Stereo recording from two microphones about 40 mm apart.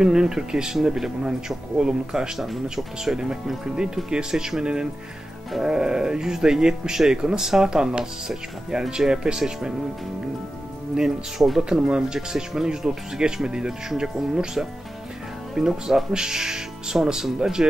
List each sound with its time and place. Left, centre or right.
0.0 s speech: centre
2.3 s speech: centre
2.7 s speech: centre
11.0 s speech: centre
11.8 s speech: right